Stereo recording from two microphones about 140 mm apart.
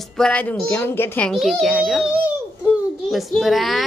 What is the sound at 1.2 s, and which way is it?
A woman's voice, centre (ahead or behind).